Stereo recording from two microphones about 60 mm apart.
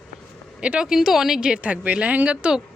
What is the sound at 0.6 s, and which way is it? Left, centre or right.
Speech, centre.